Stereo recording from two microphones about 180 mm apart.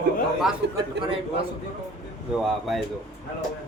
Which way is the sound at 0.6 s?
70° right (ahead or behind).